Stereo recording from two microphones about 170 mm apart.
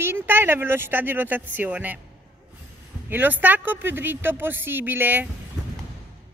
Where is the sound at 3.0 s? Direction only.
10° right (ahead or behind).